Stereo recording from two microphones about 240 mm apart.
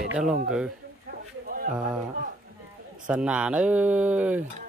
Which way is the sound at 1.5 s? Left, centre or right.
Right.